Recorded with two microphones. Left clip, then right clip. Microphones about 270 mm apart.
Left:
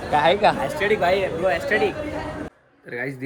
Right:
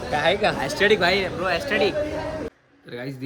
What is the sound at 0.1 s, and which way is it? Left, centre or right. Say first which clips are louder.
Speech: left 4 dB; centre.